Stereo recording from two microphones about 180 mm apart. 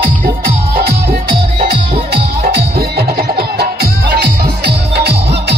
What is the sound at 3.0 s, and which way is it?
Music, 60° right (ahead or behind).